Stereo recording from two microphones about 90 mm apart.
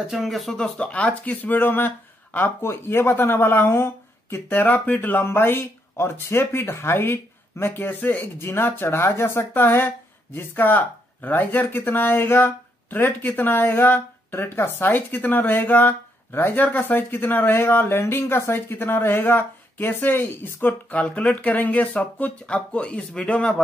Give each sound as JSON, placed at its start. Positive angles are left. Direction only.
{"t": 0.1, "sound": "speech", "side_deg": 0}